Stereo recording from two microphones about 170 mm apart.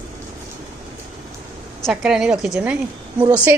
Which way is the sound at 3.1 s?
25° right (ahead or behind).